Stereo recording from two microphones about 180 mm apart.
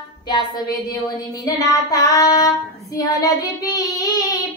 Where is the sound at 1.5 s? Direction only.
15° left (ahead or behind).